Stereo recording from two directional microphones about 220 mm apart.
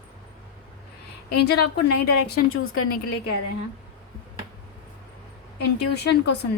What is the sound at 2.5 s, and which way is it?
Speech, 70° left (ahead or behind).